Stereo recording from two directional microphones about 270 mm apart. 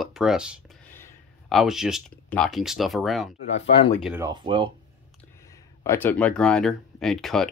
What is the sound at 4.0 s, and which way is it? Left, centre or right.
Speech, centre.